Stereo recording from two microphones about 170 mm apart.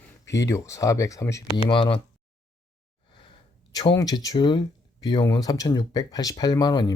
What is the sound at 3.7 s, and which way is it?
Speech, 20° left (ahead or behind).